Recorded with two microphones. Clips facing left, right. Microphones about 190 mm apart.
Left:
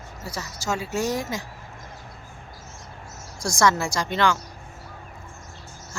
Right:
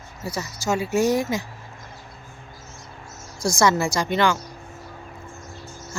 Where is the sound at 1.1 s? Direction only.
60° right (ahead or behind).